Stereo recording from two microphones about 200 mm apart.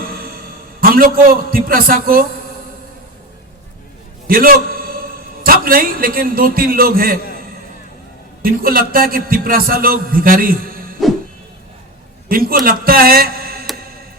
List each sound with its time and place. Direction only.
0.1 s a sound: 50° right (ahead or behind)
0.8 s a man's voice: 45° right (ahead or behind)
4.3 s a man's voice: 45° right (ahead or behind)
8.4 s a man's voice: 45° right (ahead or behind)
11.0 s music: centre (ahead or behind)
12.3 s a man's voice: 45° right (ahead or behind)